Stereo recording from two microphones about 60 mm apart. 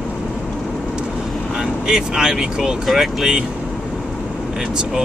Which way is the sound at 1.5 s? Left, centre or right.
Centre.